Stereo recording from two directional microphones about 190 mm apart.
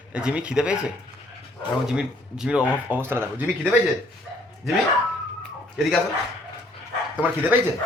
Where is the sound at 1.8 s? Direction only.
5° right (ahead or behind).